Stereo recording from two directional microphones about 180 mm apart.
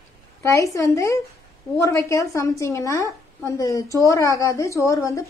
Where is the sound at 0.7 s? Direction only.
15° left (ahead or behind).